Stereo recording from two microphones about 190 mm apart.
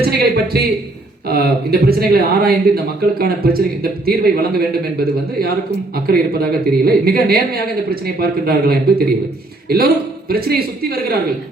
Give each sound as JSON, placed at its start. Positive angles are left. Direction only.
{"t": 0.0, "sound": "a sound", "side_deg": -55}
{"t": 1.3, "sound": "speech", "side_deg": -55}
{"t": 6.1, "sound": "speech", "side_deg": -55}